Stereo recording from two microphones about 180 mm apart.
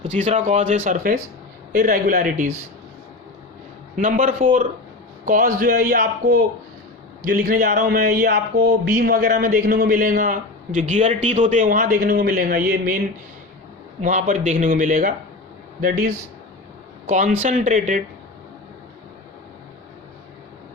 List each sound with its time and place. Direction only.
0.1 s a man's voice: 45° right (ahead or behind)
3.9 s a man's voice: 45° right (ahead or behind)
14.0 s a man's voice: 45° right (ahead or behind)